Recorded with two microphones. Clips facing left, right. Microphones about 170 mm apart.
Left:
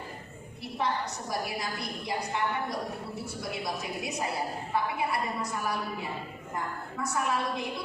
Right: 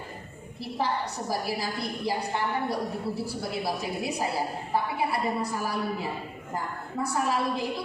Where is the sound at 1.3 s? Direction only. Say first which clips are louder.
Right 3 dB; 30° right (ahead or behind).